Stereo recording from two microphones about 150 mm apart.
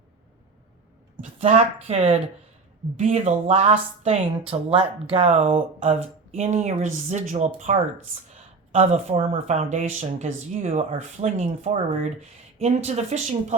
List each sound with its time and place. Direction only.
1.2 s speech: 50° right (ahead or behind)
8.3 s a sound: 45° right (ahead or behind)
9.3 s speech: 50° right (ahead or behind)